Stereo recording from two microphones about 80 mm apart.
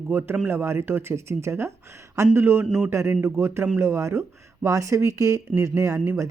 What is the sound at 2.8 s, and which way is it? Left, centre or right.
Speech, right.